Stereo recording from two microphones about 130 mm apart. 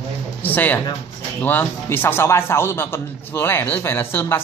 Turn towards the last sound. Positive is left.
turn(degrees=15)  # may be behind; listen again after turning